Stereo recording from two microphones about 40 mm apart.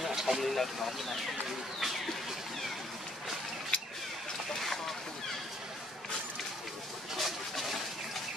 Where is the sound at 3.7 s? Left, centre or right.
Left.